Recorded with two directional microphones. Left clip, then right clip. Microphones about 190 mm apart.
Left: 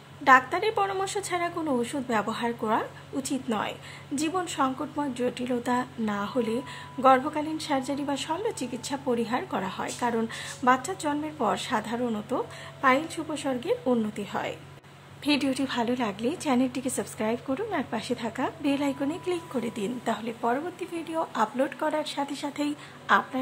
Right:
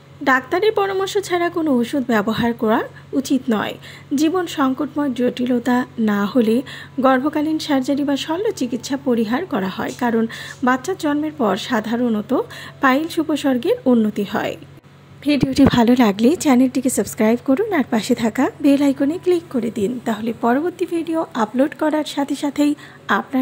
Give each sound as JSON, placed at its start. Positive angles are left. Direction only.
{"t": 0.2, "sound": "a woman's voice", "side_deg": -25}